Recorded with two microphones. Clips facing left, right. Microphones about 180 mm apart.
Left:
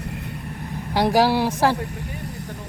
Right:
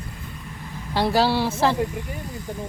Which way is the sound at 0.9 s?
15° left (ahead or behind).